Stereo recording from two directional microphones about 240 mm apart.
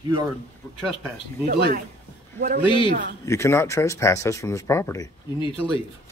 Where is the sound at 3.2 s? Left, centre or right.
Centre.